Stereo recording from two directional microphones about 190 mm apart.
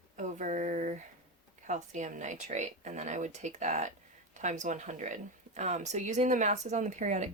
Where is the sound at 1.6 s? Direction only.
40° right (ahead or behind).